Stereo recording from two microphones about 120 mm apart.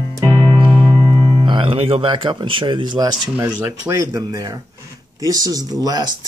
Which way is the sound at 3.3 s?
20° right (ahead or behind).